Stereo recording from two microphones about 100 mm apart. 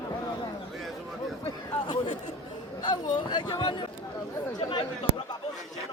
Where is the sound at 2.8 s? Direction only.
45° left (ahead or behind).